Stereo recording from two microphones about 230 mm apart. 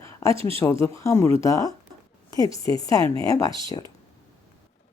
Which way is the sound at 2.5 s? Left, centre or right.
Right.